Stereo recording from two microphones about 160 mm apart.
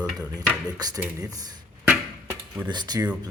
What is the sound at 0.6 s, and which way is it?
Speech, 25° right (ahead or behind).